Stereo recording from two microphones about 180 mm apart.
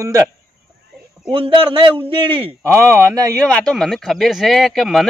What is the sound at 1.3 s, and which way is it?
A man's voice, 30° right (ahead or behind).